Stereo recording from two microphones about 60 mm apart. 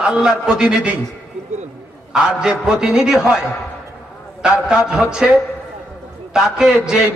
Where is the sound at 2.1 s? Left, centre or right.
Centre.